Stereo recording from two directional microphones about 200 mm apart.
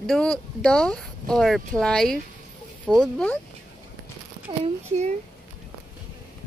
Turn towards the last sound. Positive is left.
turn(degrees=-35)  # may be behind; listen again after turning